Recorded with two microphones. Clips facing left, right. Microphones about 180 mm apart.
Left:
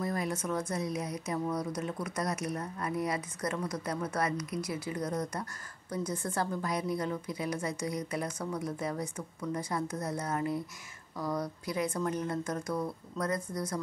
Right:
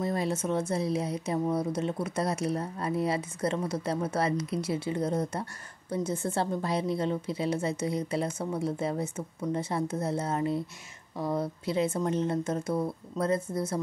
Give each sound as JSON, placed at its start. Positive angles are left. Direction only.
{"t": 0.0, "sound": "speech", "side_deg": -25}